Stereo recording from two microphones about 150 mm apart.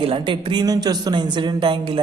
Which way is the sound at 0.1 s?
35° right (ahead or behind).